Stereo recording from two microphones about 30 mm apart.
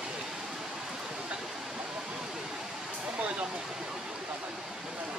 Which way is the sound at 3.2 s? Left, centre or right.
Right.